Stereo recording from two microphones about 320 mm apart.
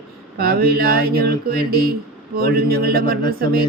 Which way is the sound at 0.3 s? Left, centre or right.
Right.